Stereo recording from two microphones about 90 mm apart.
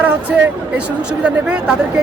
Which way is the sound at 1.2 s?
10° right (ahead or behind).